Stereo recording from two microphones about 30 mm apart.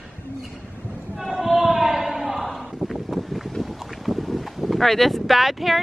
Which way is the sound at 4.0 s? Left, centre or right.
Centre.